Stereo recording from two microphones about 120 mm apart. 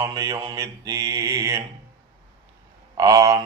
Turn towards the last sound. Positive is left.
turn(degrees=-30)  # may be behind; listen again after turning